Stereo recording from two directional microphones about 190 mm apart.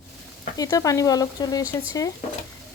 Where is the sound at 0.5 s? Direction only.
20° left (ahead or behind).